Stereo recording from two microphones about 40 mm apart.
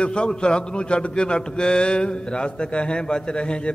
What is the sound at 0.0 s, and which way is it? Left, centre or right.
A man's voice, left.